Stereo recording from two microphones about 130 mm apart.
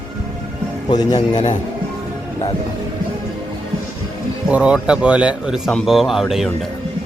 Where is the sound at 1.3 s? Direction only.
70° left (ahead or behind).